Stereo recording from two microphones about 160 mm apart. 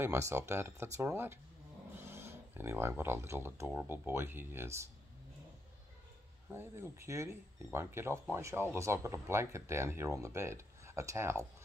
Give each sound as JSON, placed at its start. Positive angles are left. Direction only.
{"t": 0.0, "sound": "speech", "side_deg": -15}
{"t": 6.5, "sound": "speech", "side_deg": -15}